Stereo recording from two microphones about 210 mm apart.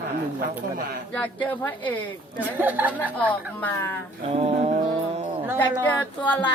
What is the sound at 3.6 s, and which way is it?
Speech, 10° left (ahead or behind).